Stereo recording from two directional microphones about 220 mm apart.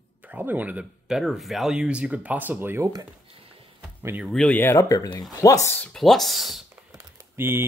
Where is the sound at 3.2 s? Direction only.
25° right (ahead or behind).